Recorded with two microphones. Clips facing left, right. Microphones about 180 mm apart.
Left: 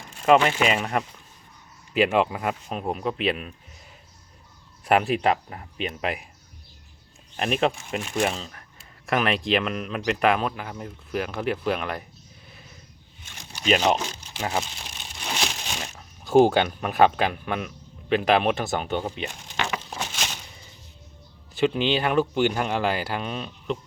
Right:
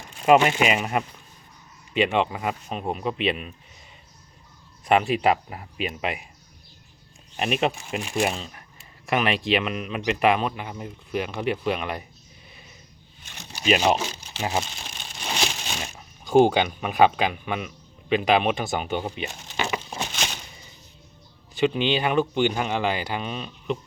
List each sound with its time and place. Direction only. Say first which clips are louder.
0.3 s speech: right 2 dB; 20° right (ahead or behind)
0.6 s speech: right 1 dB; 5° right (ahead or behind)
4.9 s speech: right 1 dB; centre (ahead or behind)
7.3 s speech: left 1 dB; 5° right (ahead or behind)
13.5 s speech: right 1 dB; 10° right (ahead or behind)
15.8 s speech: right 1 dB; 5° right (ahead or behind)
21.5 s speech: even; centre (ahead or behind)